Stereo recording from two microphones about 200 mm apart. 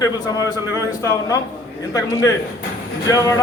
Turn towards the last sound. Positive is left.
turn(degrees=15)  # may be behind; listen again after turning